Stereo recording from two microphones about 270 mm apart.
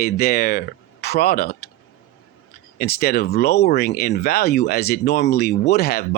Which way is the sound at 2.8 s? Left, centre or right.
Left.